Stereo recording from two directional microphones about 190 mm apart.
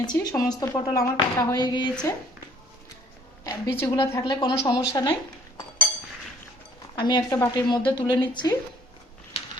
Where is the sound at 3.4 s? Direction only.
20° left (ahead or behind).